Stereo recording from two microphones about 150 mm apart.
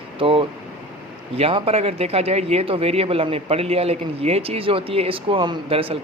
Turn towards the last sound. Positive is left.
turn(degrees=-40)  # may be behind; listen again after turning